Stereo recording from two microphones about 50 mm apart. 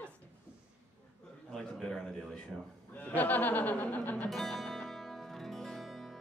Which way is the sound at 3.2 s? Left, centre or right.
Left.